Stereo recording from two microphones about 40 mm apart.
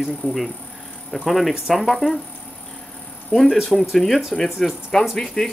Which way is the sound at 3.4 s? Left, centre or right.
Centre.